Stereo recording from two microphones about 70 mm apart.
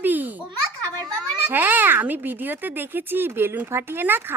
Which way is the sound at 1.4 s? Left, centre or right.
Right.